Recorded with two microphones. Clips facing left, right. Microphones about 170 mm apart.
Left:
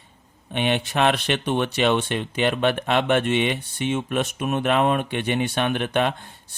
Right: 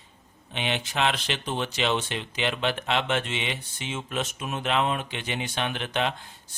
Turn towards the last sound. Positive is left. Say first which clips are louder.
# left 4 dB
turn(degrees=55)  # may be behind; listen again after turning